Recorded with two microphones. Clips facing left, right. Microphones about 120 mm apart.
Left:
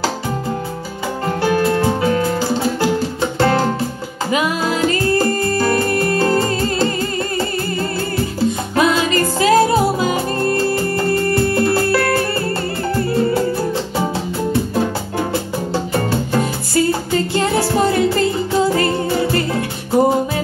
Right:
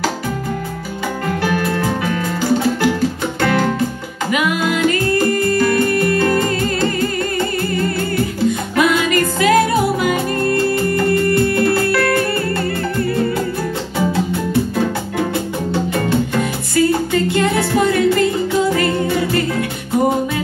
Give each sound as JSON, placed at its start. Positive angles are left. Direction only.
{"t": 1.4, "sound": "music", "side_deg": 30}
{"t": 15.7, "sound": "music", "side_deg": 35}